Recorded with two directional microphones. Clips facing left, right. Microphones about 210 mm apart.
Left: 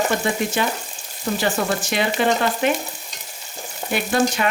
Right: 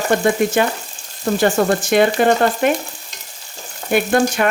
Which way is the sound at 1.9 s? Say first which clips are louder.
Right 6 dB; 50° right (ahead or behind).